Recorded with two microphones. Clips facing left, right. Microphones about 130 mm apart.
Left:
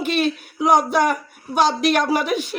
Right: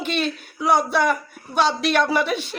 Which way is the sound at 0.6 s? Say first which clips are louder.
Left 3 dB; 45° left (ahead or behind).